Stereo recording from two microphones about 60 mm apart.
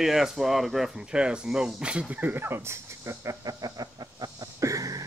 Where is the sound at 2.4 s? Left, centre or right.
Right.